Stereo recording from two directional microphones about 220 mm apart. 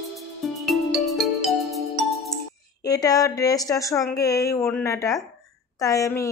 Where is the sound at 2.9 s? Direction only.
15° left (ahead or behind).